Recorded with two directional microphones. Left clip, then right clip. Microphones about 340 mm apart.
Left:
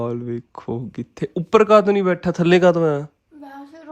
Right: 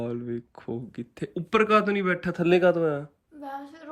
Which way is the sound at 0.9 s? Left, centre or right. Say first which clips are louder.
Left 8 dB; centre.